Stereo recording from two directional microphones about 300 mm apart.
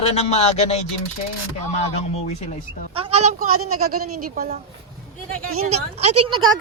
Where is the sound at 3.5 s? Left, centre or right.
Right.